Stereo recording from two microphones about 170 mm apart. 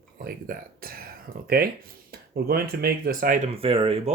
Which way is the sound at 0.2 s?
60° right (ahead or behind).